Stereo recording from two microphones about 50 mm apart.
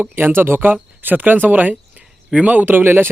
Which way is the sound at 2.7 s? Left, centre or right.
Right.